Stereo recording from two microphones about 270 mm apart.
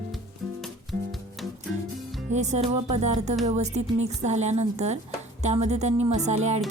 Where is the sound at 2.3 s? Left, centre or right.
Right.